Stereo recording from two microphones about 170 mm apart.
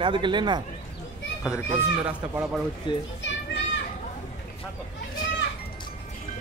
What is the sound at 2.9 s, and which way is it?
Speech, 30° left (ahead or behind).